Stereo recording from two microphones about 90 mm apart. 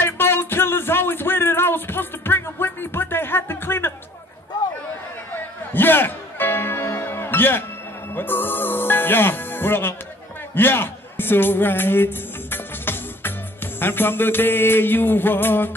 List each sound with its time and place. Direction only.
0.0 s music: 25° left (ahead or behind)
5.3 s music: 20° left (ahead or behind)